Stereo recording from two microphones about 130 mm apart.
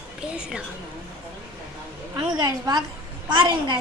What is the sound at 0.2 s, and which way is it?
Speech, 5° right (ahead or behind).